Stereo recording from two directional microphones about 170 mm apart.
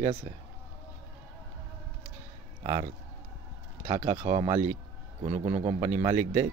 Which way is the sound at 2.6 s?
40° right (ahead or behind).